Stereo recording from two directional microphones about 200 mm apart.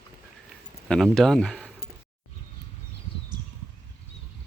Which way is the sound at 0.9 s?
Centre (ahead or behind).